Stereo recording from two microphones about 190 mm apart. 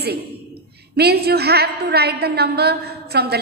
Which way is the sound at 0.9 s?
55° right (ahead or behind).